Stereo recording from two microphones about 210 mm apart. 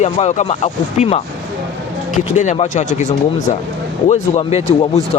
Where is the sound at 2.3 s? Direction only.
30° left (ahead or behind).